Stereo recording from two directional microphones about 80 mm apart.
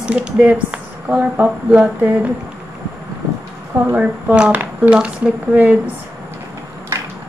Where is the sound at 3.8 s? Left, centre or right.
Centre.